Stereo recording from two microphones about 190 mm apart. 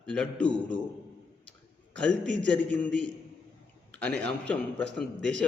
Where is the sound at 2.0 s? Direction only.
5° left (ahead or behind).